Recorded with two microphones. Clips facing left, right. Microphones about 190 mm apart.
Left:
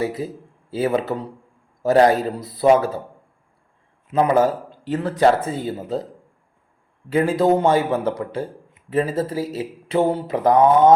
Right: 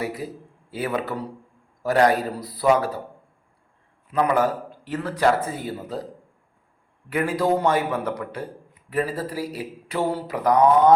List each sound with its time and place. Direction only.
0.0 s a man's voice: 25° left (ahead or behind)
4.1 s a man's voice: 25° left (ahead or behind)
7.1 s a man's voice: 25° left (ahead or behind)